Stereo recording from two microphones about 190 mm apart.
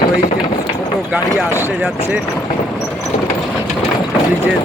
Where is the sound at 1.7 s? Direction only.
5° right (ahead or behind).